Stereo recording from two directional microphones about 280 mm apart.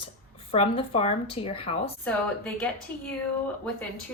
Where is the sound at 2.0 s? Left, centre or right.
Centre.